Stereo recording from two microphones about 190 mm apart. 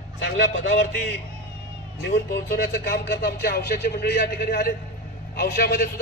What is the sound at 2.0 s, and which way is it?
A man's voice, 65° left (ahead or behind).